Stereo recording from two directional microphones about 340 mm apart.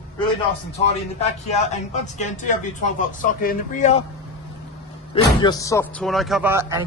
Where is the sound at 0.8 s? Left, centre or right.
Centre.